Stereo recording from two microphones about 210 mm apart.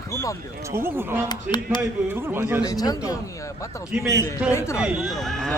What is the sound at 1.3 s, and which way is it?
Speech, 20° left (ahead or behind).